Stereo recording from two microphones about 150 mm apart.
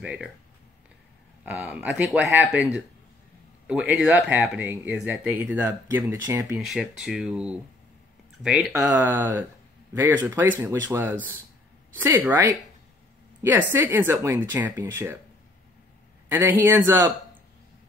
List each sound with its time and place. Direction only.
0.0 s speech: 10° right (ahead or behind)
1.4 s speech: 10° right (ahead or behind)
6.6 s speech: 5° right (ahead or behind)
8.9 s speech: 15° right (ahead or behind)
16.3 s speech: 15° right (ahead or behind)